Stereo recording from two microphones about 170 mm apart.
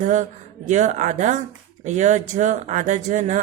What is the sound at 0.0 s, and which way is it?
Speech, 45° right (ahead or behind).